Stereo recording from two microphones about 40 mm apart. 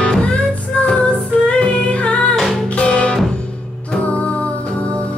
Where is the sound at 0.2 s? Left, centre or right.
Left.